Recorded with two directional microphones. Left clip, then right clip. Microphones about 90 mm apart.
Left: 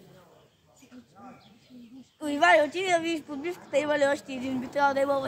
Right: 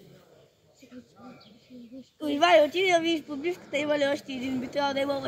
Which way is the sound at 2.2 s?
40° left (ahead or behind).